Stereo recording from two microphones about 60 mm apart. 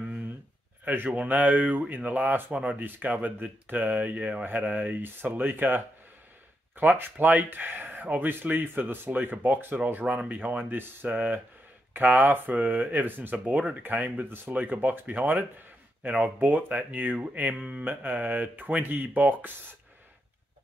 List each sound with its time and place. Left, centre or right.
0.8 s speech: right